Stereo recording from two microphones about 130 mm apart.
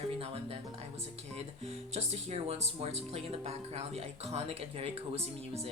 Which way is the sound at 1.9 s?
55° right (ahead or behind).